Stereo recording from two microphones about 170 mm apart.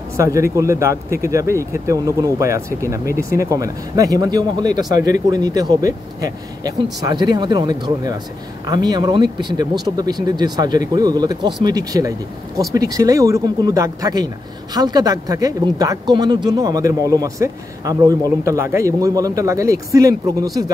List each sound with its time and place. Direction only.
0.2 s speech: 20° right (ahead or behind)